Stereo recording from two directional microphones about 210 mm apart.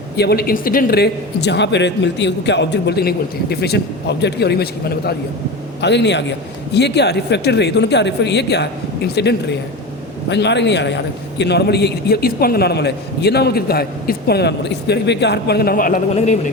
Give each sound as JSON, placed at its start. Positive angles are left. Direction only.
{"t": 0.2, "sound": "a man's voice", "side_deg": 45}